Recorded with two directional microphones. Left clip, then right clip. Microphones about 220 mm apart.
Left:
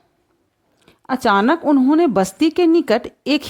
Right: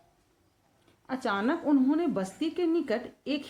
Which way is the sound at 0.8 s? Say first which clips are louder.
Left 14 dB; 45° left (ahead or behind).